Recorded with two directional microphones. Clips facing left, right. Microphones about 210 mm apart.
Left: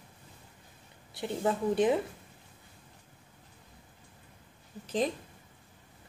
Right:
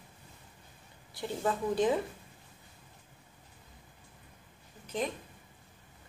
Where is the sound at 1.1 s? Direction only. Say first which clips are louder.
Left 2 dB; 20° left (ahead or behind).